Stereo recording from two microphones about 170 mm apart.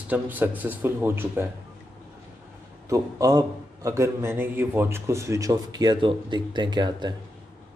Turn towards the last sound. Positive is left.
turn(degrees=-25)  # may be behind; listen again after turning